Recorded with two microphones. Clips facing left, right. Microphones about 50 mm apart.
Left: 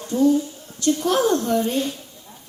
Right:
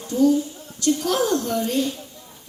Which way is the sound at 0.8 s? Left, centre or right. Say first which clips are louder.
Left 2 dB; left.